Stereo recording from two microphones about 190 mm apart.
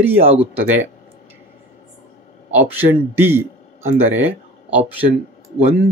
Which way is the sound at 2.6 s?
10° right (ahead or behind).